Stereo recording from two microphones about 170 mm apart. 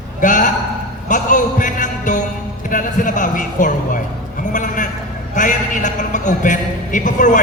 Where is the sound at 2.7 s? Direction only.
50° left (ahead or behind).